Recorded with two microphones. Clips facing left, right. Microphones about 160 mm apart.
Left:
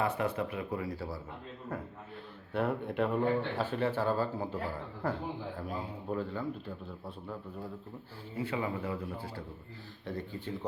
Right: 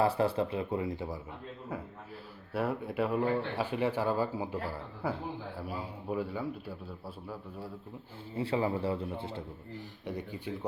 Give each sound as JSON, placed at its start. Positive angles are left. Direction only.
{"t": 0.0, "sound": "speech", "side_deg": -30}
{"t": 2.5, "sound": "speech", "side_deg": -5}
{"t": 8.4, "sound": "speech", "side_deg": -30}
{"t": 10.1, "sound": "speech", "side_deg": -15}